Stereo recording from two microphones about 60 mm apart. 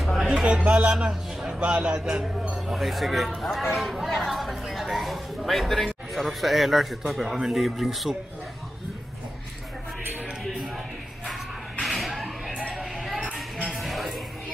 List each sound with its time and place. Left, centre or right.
0.0 s music: centre
0.7 s a man's voice: centre
11.8 s a sound: centre
13.3 s music: centre
13.7 s music: centre